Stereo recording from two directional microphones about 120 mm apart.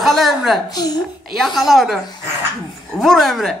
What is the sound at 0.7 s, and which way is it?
Speech, 35° left (ahead or behind).